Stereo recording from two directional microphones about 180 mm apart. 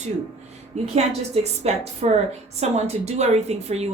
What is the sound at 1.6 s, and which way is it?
Speech, 35° right (ahead or behind).